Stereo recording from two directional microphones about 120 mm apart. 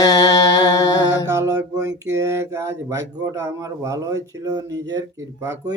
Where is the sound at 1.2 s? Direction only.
25° right (ahead or behind).